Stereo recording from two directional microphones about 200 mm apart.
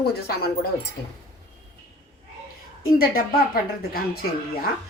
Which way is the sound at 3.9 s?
50° left (ahead or behind).